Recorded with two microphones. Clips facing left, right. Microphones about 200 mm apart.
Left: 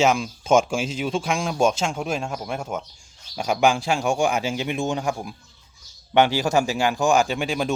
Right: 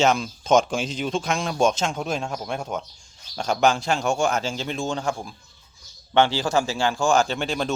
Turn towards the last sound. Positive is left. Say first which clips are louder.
# left 1 dB
turn(degrees=10)  # may be behind; listen again after turning